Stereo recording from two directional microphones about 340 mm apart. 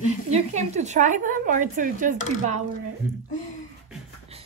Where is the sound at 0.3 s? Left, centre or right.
Centre.